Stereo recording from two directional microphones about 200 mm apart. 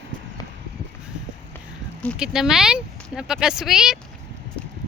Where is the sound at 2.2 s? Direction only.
Centre (ahead or behind).